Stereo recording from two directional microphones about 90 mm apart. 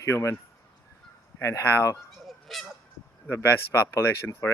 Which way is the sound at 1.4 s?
35° left (ahead or behind).